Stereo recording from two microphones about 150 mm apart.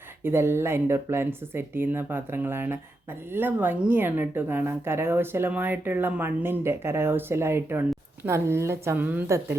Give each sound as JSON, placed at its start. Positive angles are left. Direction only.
{"t": 0.3, "sound": "a woman's voice", "side_deg": -15}